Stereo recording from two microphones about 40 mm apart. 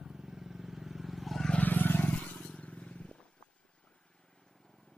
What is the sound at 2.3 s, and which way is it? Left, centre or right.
Vehicle, left.